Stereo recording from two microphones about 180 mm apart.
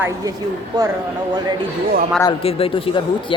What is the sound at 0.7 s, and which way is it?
Speech, 25° right (ahead or behind).